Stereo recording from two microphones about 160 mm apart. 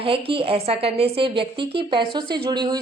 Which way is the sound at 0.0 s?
35° right (ahead or behind).